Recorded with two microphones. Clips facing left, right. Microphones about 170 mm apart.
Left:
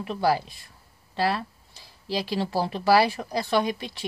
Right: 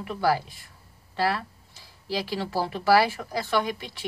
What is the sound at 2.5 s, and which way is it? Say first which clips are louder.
Speech: even; 25° left (ahead or behind).